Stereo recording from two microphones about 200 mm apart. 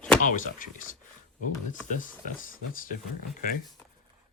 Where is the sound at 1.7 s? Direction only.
40° left (ahead or behind).